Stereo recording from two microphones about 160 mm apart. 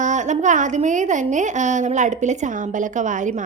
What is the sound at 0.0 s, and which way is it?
A woman's voice, 50° right (ahead or behind).